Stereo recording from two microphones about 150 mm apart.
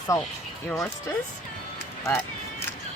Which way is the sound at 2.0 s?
15° left (ahead or behind).